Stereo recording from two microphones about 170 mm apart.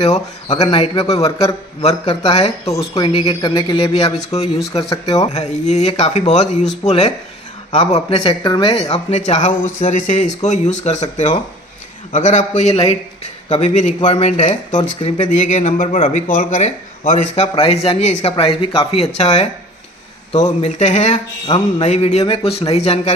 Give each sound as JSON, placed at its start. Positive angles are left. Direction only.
{"t": 0.0, "sound": "a man's voice", "side_deg": 40}
{"t": 4.8, "sound": "mantra", "side_deg": 25}
{"t": 5.2, "sound": "a man's voice", "side_deg": 40}
{"t": 8.9, "sound": "a man's voice", "side_deg": 40}
{"t": 14.8, "sound": "a man's voice", "side_deg": 30}
{"t": 15.1, "sound": "a man's voice", "side_deg": 45}
{"t": 20.6, "sound": "speech", "side_deg": 40}
{"t": 21.5, "sound": "mantra", "side_deg": 30}
{"t": 21.8, "sound": "a man's voice", "side_deg": 40}